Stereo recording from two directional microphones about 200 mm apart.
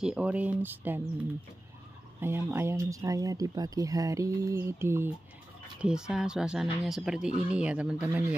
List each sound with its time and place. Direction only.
0.0 s speech: 5° right (ahead or behind)
2.1 s speech: 10° right (ahead or behind)